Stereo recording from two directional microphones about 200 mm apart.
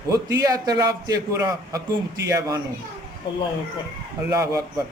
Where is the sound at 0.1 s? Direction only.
15° right (ahead or behind).